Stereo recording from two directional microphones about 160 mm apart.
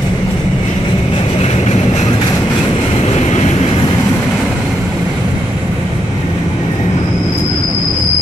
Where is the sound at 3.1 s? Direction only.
45° left (ahead or behind).